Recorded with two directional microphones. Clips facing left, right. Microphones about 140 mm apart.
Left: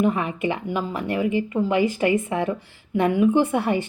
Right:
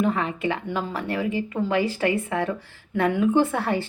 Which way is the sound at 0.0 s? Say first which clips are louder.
Left 2 dB; 15° left (ahead or behind).